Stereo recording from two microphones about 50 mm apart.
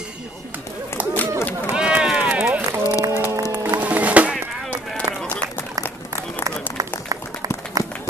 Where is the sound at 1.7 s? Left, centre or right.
Centre.